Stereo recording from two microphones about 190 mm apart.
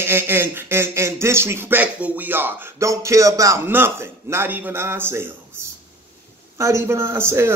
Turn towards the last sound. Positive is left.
turn(degrees=-15)  # may be behind; listen again after turning